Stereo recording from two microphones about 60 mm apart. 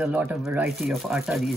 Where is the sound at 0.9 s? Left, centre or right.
Centre.